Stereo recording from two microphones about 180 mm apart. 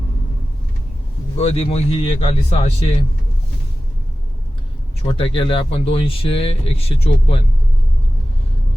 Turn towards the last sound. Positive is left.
turn(degrees=30)  # may be behind; listen again after turning